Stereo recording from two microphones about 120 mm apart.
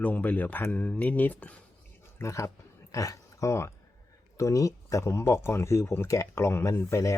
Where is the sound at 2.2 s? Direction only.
25° left (ahead or behind).